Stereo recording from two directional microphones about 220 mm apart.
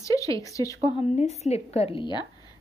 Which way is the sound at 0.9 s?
30° left (ahead or behind).